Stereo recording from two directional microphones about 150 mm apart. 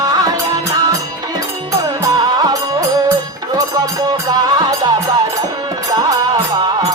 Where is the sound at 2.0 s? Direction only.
25° right (ahead or behind).